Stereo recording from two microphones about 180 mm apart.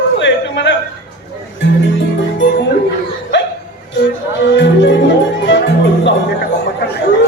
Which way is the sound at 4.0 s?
85° left.